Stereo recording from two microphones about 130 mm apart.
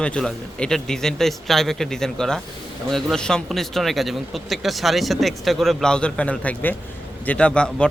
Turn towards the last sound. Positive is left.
turn(degrees=5)  # may be behind; listen again after turning